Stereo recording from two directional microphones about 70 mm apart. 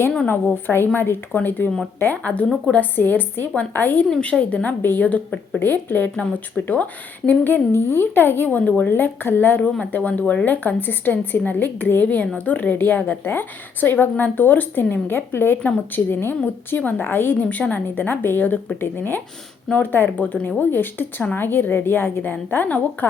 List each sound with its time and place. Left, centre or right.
0.3 s a woman's voice: left
7.3 s a woman's voice: left